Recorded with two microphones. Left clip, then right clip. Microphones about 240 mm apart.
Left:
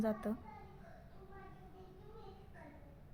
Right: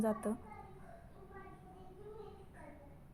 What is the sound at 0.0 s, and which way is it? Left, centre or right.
Speech, centre.